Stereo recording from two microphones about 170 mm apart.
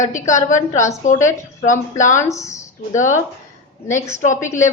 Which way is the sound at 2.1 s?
15° left (ahead or behind).